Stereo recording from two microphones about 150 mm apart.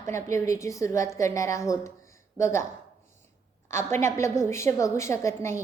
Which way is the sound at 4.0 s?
20° left (ahead or behind).